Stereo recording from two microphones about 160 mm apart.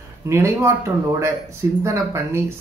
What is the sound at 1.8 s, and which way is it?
Speech, 15° right (ahead or behind).